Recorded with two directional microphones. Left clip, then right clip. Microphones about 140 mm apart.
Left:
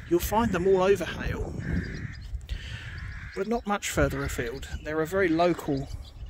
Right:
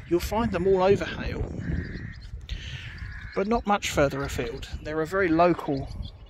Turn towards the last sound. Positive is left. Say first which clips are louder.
# right 3 dB
turn(degrees=25)  # may be behind; listen again after turning